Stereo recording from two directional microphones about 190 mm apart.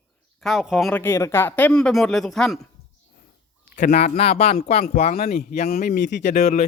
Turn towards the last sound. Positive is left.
turn(degrees=45)  # may be behind; listen again after turning